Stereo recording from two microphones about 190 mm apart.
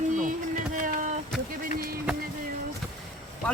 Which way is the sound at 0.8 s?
45° right (ahead or behind).